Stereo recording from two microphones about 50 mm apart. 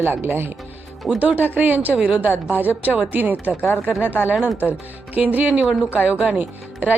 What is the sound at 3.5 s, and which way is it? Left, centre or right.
Speech, left.